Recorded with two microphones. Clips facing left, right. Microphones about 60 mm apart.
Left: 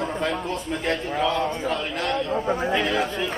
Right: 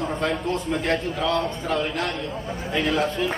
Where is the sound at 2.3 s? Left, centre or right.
Left.